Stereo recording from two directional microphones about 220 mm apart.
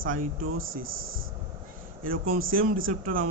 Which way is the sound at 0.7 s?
65° right (ahead or behind).